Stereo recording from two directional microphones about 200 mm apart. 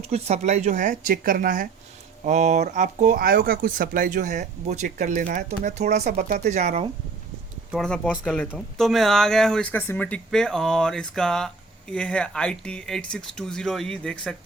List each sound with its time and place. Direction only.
0.1 s speech: 35° right (ahead or behind)
6.1 s speech: 50° right (ahead or behind)
6.5 s speech: 35° right (ahead or behind)
7.7 s speech: centre (ahead or behind)